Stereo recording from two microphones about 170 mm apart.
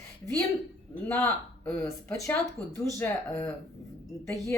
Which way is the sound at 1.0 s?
10° left (ahead or behind).